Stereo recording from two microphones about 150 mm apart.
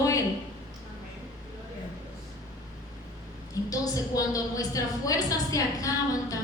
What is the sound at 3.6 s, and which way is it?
A woman's voice, 25° left (ahead or behind).